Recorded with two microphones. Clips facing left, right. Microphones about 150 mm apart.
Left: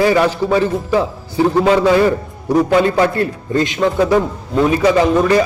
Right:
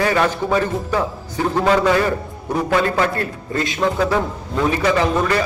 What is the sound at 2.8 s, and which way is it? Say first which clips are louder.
Speech: left 5 dB; 25° left (ahead or behind).